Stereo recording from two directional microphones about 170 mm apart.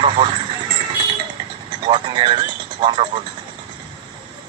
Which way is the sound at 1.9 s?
30° right (ahead or behind).